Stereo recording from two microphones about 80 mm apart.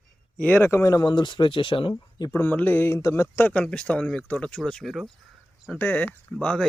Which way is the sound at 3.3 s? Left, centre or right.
Left.